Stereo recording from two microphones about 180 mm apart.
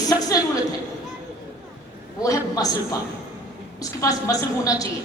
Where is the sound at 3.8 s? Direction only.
20° left (ahead or behind).